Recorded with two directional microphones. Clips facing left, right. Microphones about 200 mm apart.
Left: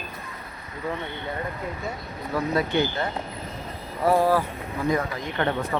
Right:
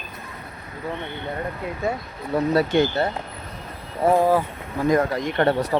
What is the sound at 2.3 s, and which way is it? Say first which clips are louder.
Speech: right 5 dB; 35° right (ahead or behind).